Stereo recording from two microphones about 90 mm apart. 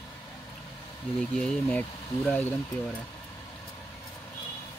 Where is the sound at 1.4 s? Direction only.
15° left (ahead or behind).